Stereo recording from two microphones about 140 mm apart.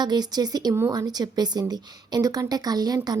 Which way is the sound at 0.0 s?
30° right (ahead or behind).